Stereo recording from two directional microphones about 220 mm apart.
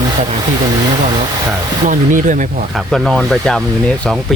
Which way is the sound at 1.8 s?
35° right (ahead or behind).